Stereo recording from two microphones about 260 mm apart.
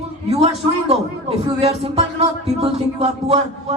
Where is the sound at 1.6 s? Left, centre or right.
Right.